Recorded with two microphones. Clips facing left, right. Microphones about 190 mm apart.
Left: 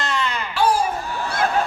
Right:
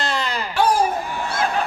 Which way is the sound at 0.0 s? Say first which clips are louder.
Even; 35° right (ahead or behind).